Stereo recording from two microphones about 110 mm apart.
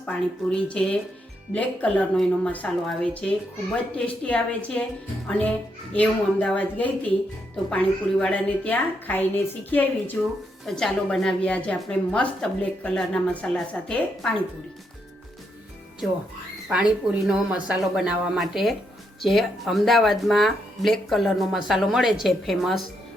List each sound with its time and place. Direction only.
0.0 s speech: 10° left (ahead or behind)
10.7 s speech: 5° left (ahead or behind)
16.0 s speech: centre (ahead or behind)